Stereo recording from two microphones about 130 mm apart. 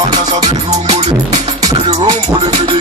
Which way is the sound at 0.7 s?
55° right (ahead or behind).